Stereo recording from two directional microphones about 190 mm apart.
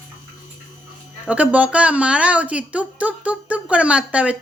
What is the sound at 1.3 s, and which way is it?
A woman's voice, 5° right (ahead or behind).